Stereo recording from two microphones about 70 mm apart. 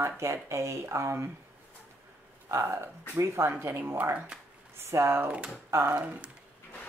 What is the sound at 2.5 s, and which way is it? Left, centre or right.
Speech, right.